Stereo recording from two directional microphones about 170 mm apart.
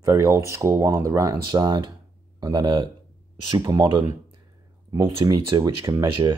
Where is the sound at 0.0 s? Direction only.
15° right (ahead or behind).